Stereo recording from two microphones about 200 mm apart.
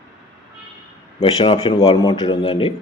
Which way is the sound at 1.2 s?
30° left (ahead or behind).